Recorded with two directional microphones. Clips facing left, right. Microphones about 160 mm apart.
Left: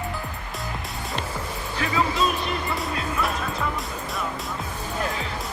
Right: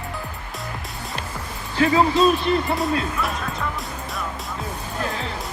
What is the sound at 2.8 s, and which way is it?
Speech, centre (ahead or behind).